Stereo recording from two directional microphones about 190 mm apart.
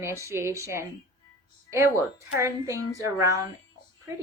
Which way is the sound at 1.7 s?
15° right (ahead or behind).